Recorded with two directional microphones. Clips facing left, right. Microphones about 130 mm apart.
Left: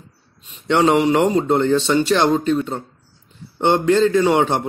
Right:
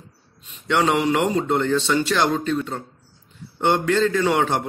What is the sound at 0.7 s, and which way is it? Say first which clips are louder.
A man's voice: left 4 dB; 25° left (ahead or behind).